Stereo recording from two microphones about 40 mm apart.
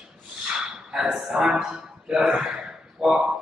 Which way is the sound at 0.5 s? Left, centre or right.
Right.